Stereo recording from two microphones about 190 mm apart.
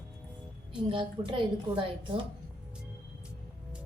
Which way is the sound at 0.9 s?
25° right (ahead or behind).